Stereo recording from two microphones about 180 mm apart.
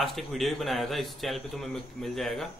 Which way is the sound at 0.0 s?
Centre (ahead or behind).